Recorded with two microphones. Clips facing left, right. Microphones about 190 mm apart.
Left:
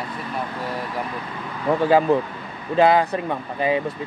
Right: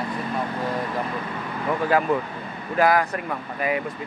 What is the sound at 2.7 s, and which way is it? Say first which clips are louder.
Speech: left 3 dB; 25° left (ahead or behind).